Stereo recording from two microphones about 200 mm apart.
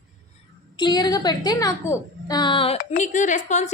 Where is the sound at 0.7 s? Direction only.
20° left (ahead or behind).